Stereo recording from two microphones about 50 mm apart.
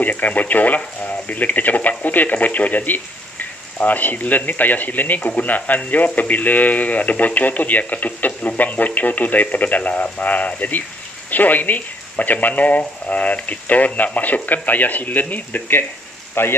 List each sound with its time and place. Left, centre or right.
0.0 s speech: left
16.4 s speech: left